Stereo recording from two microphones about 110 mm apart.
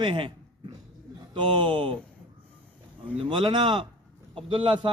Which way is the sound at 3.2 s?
45° right (ahead or behind).